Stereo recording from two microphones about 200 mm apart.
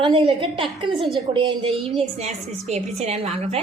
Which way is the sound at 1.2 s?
25° right (ahead or behind).